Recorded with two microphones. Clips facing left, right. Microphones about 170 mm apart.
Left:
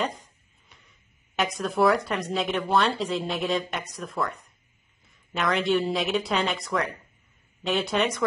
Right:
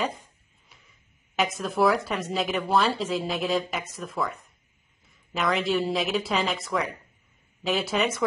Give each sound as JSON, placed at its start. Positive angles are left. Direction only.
{"t": 0.0, "sound": "speech", "side_deg": 0}